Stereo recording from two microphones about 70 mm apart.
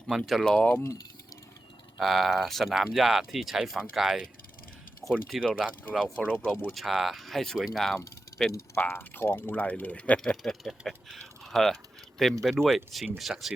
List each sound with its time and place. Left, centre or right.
0.2 s speech: centre
2.0 s speech: centre
5.3 s speech: centre
6.0 s speech: centre
6.5 s speech: left
6.7 s speech: centre
8.5 s speech: left; by 10.3 s centre
10.4 s speech: centre